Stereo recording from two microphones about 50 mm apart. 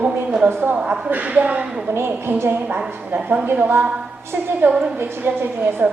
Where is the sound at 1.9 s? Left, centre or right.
Right.